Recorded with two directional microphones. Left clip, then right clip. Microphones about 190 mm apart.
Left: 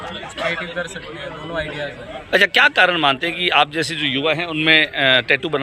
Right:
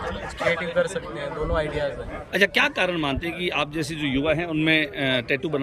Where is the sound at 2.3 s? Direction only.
10° right (ahead or behind).